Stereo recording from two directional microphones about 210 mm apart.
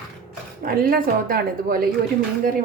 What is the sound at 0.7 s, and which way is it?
A woman's voice, 45° right (ahead or behind).